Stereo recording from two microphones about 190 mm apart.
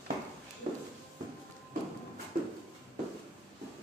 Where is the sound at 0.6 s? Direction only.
45° right (ahead or behind).